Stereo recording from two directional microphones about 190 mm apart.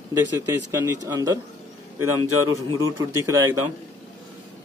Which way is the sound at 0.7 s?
15° right (ahead or behind).